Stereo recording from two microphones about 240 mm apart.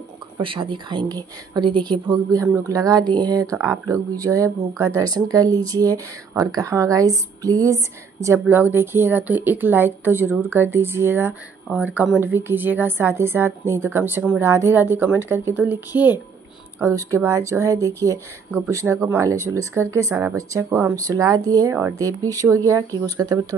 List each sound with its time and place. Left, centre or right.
0.4 s a woman's voice: right
16.8 s a woman's voice: centre